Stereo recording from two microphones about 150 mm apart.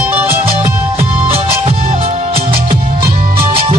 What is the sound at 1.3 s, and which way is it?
Music, 40° right (ahead or behind).